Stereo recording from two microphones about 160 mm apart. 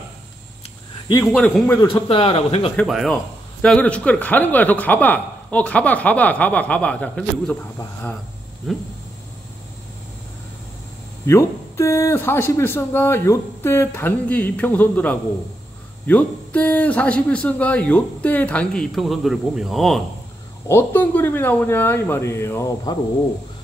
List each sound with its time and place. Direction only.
1.2 s speech: centre (ahead or behind)
1.9 s speech: 35° left (ahead or behind)
2.7 s speech: 5° left (ahead or behind)
8.7 s speech: centre (ahead or behind)
11.2 s speech: 15° left (ahead or behind); by 20.0 s centre (ahead or behind)
20.6 s speech: 15° left (ahead or behind)